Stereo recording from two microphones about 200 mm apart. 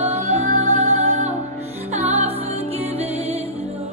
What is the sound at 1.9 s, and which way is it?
Music, 30° right (ahead or behind).